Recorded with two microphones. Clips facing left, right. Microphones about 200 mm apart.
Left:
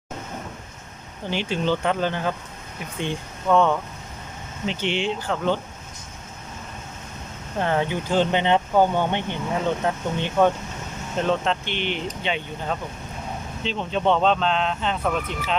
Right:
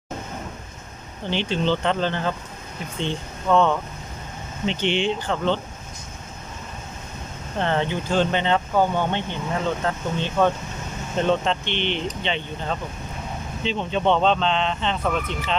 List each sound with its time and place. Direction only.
1.3 s speech: 10° left (ahead or behind)
7.6 s speech: 10° left (ahead or behind)
11.2 s speech: centre (ahead or behind)